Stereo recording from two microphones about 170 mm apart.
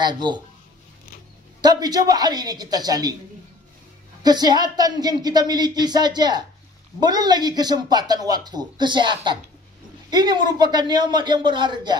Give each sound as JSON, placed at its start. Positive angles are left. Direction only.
{"t": 0.0, "sound": "speech", "side_deg": -25}
{"t": 1.6, "sound": "speech", "side_deg": -25}
{"t": 4.2, "sound": "speech", "side_deg": -25}